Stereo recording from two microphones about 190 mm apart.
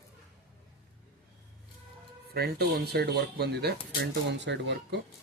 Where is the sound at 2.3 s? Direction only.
55° right (ahead or behind).